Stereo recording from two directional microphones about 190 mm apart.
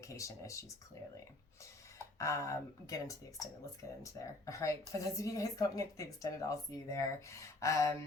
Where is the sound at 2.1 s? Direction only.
15° left (ahead or behind).